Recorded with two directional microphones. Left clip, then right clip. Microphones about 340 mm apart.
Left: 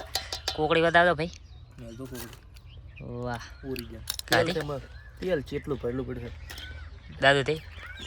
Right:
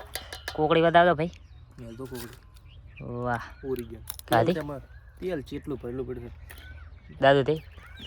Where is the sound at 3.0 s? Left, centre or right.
Centre.